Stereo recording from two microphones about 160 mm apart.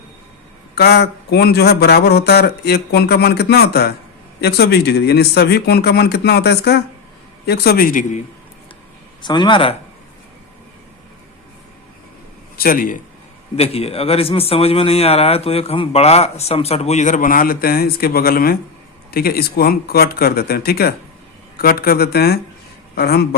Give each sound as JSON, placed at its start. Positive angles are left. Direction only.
{"t": 0.8, "sound": "speech", "side_deg": 90}
{"t": 9.2, "sound": "speech", "side_deg": 30}
{"t": 12.5, "sound": "a man's voice", "side_deg": 65}
{"t": 13.6, "sound": "a man's voice", "side_deg": 40}